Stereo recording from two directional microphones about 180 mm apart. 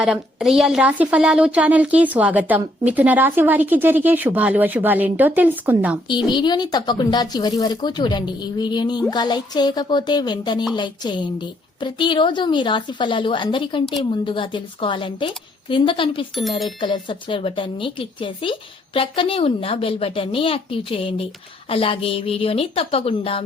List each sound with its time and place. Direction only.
0.0 s speech: 5° right (ahead or behind)
6.1 s a woman's voice: 25° left (ahead or behind)
16.3 s speech: centre (ahead or behind)
16.8 s a woman's voice: 25° left (ahead or behind)